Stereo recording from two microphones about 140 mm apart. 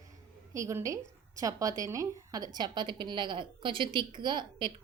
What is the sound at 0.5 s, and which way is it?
A woman's voice, 20° right (ahead or behind).